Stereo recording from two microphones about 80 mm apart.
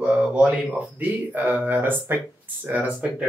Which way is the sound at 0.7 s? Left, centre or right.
Right.